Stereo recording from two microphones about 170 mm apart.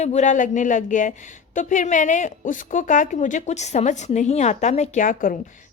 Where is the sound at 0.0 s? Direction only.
45° left (ahead or behind).